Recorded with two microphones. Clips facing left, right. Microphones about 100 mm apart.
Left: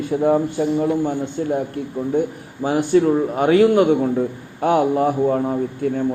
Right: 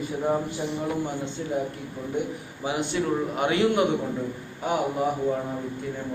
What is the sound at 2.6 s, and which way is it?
A man's voice, 40° left (ahead or behind).